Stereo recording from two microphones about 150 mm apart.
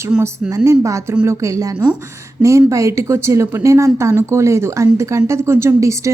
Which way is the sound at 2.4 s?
20° right (ahead or behind).